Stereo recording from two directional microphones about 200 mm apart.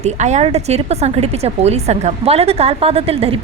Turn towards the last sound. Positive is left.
turn(degrees=-30)  # may be behind; listen again after turning